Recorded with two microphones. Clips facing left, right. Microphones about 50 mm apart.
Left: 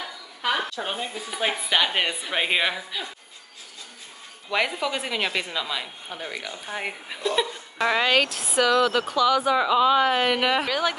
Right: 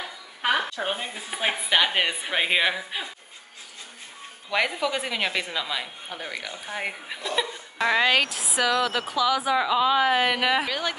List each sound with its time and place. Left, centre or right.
0.4 s a sound: right
0.8 s a woman's voice: centre
4.5 s speech: centre